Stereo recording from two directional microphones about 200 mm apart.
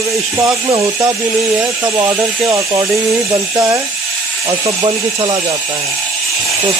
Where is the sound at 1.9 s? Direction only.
15° right (ahead or behind).